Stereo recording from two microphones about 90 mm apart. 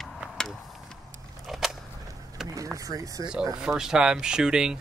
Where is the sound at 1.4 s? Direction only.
Centre (ahead or behind).